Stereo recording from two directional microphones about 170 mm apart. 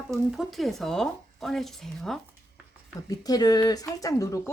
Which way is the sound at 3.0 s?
20° left (ahead or behind).